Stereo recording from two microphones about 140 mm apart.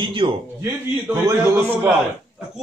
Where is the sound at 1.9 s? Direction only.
Centre (ahead or behind).